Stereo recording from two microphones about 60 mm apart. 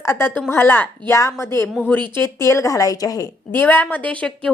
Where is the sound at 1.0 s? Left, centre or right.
Left.